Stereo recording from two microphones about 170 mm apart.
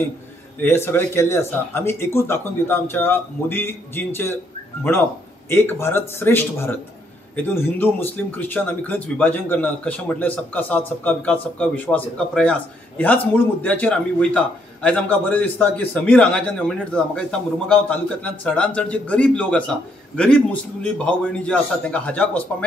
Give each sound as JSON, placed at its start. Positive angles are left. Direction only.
{"t": 0.6, "sound": "speech", "side_deg": 15}
{"t": 5.5, "sound": "speech", "side_deg": 15}